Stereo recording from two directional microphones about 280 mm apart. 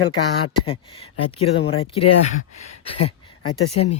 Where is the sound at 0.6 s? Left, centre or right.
Centre.